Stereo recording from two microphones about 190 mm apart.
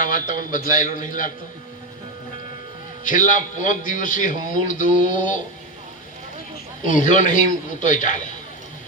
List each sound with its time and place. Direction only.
0.0 s a man's voice: 45° left (ahead or behind)
3.0 s a man's voice: 45° left (ahead or behind)
6.8 s a man's voice: 40° left (ahead or behind)